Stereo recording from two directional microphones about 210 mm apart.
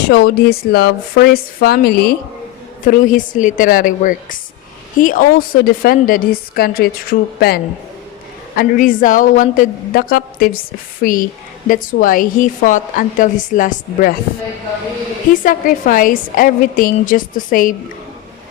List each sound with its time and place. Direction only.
0.0 s a woman's voice: 50° left (ahead or behind)
15.3 s a woman's voice: 40° left (ahead or behind)